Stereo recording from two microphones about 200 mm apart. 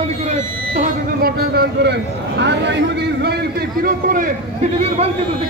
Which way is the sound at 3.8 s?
45° right (ahead or behind).